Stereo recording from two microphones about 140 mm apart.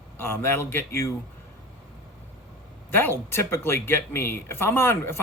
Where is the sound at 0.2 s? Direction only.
15° left (ahead or behind).